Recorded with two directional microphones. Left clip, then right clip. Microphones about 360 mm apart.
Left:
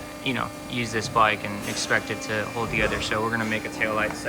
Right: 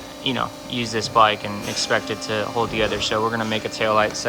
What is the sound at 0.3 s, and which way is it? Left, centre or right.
Speech, centre.